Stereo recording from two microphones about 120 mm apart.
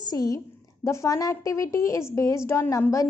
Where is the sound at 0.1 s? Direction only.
30° left (ahead or behind).